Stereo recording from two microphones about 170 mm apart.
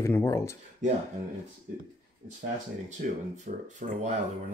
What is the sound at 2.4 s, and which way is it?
Speech, 45° right (ahead or behind).